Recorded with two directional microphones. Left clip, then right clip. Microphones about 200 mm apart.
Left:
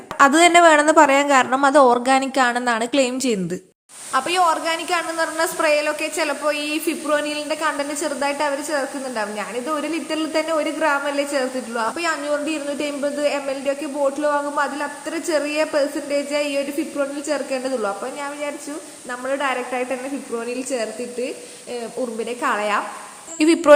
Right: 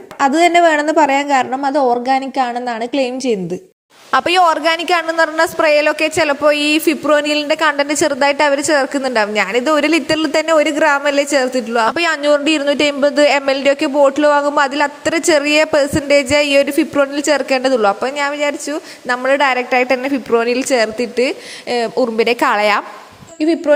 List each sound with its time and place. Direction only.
0.2 s a woman's voice: centre (ahead or behind)
4.1 s a woman's voice: 40° right (ahead or behind)
23.4 s speech: 5° left (ahead or behind)